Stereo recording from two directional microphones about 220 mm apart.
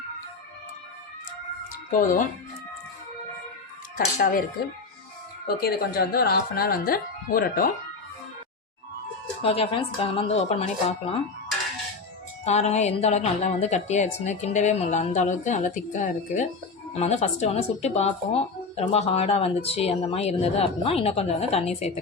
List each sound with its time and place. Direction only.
1.7 s music: 40° left (ahead or behind)
3.9 s a woman's voice: 40° left (ahead or behind)
5.5 s speech: 45° left (ahead or behind)
9.4 s speech: 25° left (ahead or behind)
12.5 s a woman's voice: 30° left (ahead or behind)